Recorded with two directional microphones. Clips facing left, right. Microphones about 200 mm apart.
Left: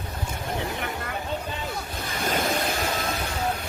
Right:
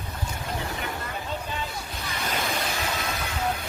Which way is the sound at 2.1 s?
50° left (ahead or behind).